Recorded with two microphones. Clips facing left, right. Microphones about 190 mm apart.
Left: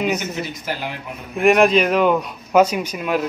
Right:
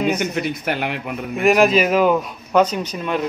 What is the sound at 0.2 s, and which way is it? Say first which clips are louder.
Speech: right 5 dB; 60° right (ahead or behind).